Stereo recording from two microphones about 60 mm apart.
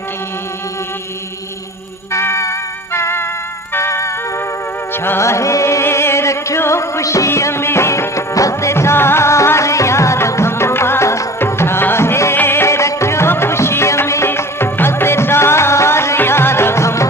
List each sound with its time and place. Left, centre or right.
2.1 s music: left